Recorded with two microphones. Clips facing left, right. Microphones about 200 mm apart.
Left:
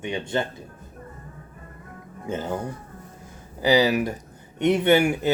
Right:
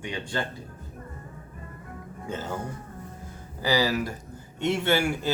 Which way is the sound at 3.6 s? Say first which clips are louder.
Left 5 dB; 20° left (ahead or behind).